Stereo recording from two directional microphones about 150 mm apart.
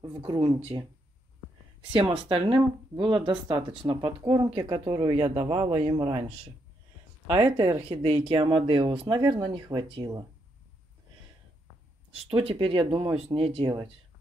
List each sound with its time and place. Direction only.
0.2 s speech: 30° right (ahead or behind)
1.9 s speech: 35° right (ahead or behind)
4.5 s speech: 40° right (ahead or behind)
4.8 s speech: 25° right (ahead or behind)
5.1 s speech: 40° right (ahead or behind)
7.9 s speech: 40° right (ahead or behind)
12.1 s speech: 40° right (ahead or behind)